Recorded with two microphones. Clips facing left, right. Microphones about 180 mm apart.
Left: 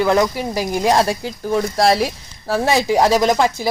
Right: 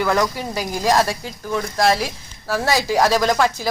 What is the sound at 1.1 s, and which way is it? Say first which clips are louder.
Speech: left 5 dB; 35° left (ahead or behind).